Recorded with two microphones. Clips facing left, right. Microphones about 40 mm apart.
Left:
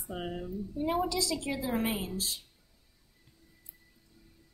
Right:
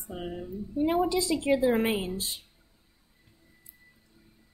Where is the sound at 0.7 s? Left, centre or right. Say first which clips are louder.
Right 5 dB; right.